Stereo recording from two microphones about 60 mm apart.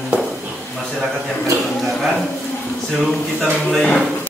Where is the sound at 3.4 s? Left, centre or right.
Centre.